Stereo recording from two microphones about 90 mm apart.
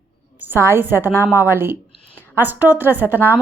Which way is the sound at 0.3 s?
25° right (ahead or behind).